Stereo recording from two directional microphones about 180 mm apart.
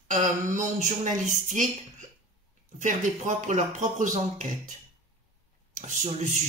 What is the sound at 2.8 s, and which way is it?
Speech, 45° right (ahead or behind).